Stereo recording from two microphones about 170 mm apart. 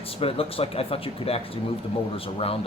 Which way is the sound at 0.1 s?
35° left (ahead or behind).